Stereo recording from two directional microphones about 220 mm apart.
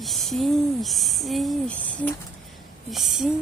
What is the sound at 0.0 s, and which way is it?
A woman's voice, centre (ahead or behind).